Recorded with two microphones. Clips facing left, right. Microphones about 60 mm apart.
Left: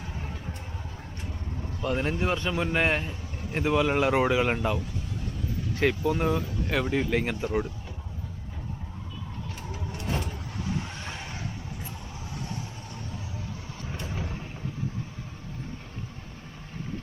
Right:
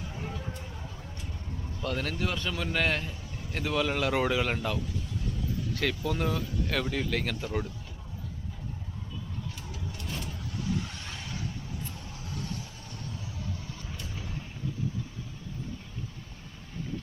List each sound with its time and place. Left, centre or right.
1.8 s speech: left
9.6 s vehicle: left
13.8 s vehicle: left